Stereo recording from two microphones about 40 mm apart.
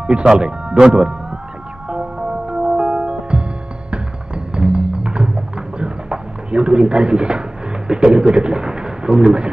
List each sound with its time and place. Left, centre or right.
0.0 s speech: right
1.9 s music: right
7.9 s a sound: right